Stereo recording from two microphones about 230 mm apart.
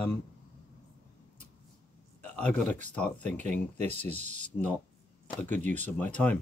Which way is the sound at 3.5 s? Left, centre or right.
Right.